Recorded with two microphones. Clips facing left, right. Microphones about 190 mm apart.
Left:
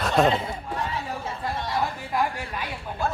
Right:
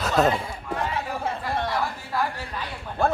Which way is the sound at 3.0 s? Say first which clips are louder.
Right 5 dB; 60° right (ahead or behind).